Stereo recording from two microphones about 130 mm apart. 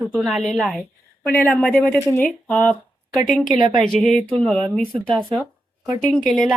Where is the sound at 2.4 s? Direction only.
5° left (ahead or behind).